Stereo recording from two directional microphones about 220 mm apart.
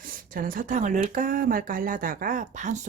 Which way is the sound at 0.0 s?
40° right (ahead or behind).